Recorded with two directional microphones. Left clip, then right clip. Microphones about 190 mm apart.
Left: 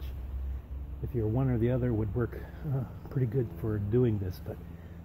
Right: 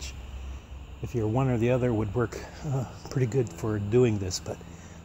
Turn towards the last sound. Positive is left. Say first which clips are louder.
# right 5 dB
turn(degrees=-40)  # may be behind; listen again after turning